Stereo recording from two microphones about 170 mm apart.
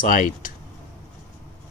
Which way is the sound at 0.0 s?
50° left (ahead or behind).